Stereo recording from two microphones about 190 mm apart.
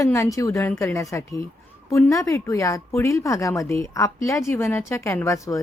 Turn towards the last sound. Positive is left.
turn(degrees=15)  # may be behind; listen again after turning